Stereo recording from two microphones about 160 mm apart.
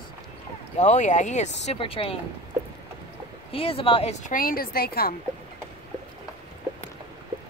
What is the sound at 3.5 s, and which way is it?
Speech, 35° left (ahead or behind).